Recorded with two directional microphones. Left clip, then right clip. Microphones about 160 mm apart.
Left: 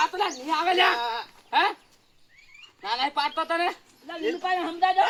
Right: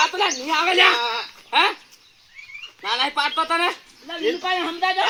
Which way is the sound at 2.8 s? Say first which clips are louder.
Right 4 dB; 25° left (ahead or behind).